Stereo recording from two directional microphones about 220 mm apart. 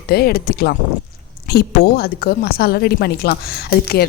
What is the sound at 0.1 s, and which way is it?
A woman's voice, 45° left (ahead or behind).